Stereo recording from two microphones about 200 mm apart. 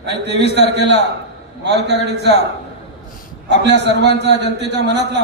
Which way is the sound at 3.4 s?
60° right (ahead or behind).